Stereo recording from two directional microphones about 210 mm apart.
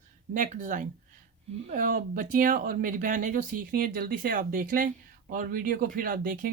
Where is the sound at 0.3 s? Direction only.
40° right (ahead or behind).